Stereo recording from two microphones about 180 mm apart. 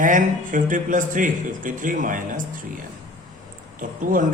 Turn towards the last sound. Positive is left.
turn(degrees=-50)  # may be behind; listen again after turning